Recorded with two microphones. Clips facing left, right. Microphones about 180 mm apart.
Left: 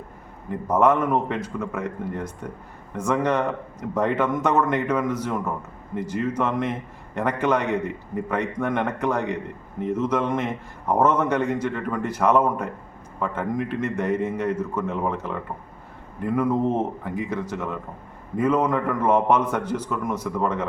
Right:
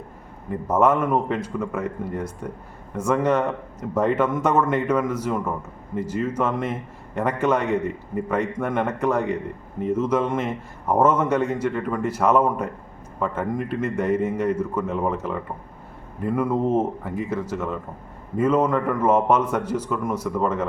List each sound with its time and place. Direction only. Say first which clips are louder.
0.7 s a man's voice: even; 10° right (ahead or behind)